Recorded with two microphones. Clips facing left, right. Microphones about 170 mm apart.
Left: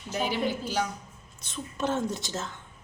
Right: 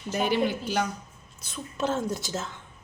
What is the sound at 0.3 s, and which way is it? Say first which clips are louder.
Speech: right 5 dB; 60° right (ahead or behind).